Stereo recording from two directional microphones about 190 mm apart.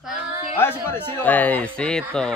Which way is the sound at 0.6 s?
10° left (ahead or behind).